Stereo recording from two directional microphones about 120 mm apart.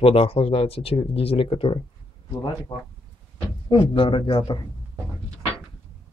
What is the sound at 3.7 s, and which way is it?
Speech, 45° left (ahead or behind).